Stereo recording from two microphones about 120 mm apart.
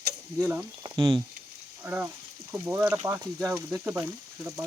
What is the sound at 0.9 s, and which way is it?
Speech, 40° right (ahead or behind).